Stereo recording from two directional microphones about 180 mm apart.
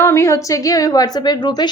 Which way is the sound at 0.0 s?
15° left (ahead or behind).